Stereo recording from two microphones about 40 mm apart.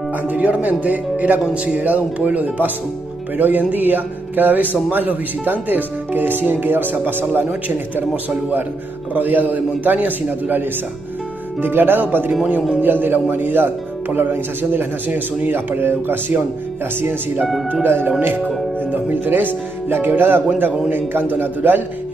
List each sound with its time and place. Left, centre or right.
0.3 s a man's voice: right
9.1 s a man's voice: right
15.0 s a man's voice: right
15.5 s speech: right
18.9 s speech: right